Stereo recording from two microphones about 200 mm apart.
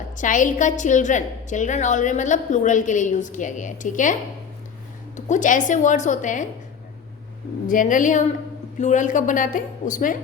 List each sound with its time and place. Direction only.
0.2 s a woman's voice: 40° left (ahead or behind)
7.7 s a woman's voice: 40° left (ahead or behind)